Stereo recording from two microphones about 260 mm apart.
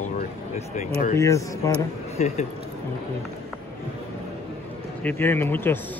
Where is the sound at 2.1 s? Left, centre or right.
Left.